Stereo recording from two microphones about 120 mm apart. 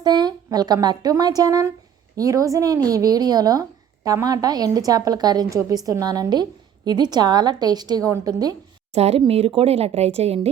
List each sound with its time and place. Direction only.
0.0 s a woman's voice: 35° right (ahead or behind)
8.9 s a woman's voice: 60° right (ahead or behind)